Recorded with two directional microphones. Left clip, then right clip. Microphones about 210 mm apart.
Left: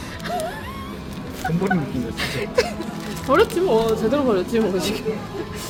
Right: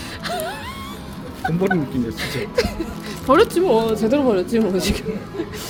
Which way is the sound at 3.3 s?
20° right (ahead or behind).